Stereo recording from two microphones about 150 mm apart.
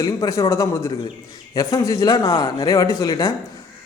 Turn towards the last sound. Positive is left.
turn(degrees=25)  # may be behind; listen again after turning